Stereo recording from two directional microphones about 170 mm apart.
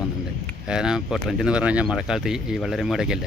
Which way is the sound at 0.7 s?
5° right (ahead or behind).